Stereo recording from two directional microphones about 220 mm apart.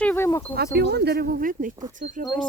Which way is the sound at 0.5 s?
50° right (ahead or behind).